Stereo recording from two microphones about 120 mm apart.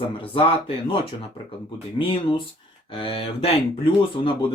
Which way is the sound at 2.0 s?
45° left (ahead or behind).